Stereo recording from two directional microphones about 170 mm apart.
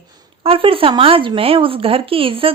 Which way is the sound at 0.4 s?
30° right (ahead or behind).